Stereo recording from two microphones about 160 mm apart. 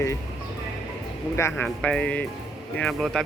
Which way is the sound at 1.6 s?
5° left (ahead or behind).